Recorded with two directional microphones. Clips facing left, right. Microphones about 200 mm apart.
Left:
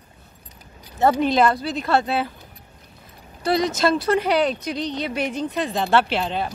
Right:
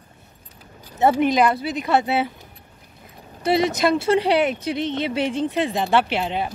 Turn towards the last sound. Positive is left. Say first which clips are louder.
# even
turn(degrees=-15)  # may be behind; listen again after turning